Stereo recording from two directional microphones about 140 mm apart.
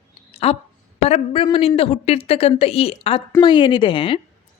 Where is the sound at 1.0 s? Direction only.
45° left (ahead or behind).